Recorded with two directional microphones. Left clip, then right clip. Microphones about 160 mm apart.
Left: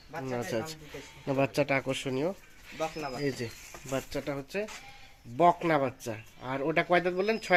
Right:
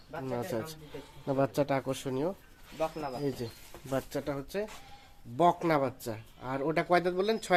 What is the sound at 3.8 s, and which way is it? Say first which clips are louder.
Speech: even; 10° right (ahead or behind).